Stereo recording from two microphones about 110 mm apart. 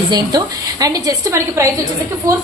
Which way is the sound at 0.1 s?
40° right (ahead or behind).